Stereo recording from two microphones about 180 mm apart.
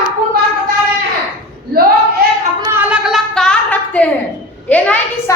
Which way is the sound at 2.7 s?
5° right (ahead or behind).